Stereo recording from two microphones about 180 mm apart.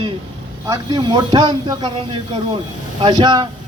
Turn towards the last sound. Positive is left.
turn(degrees=-25)  # may be behind; listen again after turning